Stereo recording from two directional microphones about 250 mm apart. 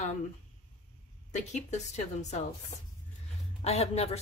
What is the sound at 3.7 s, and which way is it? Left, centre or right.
Speech, left.